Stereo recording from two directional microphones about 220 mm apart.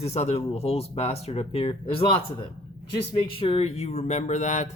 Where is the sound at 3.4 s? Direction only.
25° left (ahead or behind).